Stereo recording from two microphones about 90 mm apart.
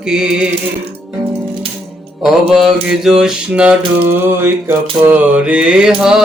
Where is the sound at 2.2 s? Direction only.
5° right (ahead or behind).